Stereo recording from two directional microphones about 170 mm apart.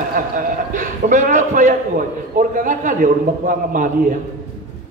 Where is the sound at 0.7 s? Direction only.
45° right (ahead or behind).